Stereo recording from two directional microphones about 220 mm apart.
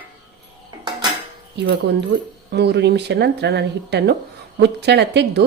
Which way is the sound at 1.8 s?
50° right (ahead or behind).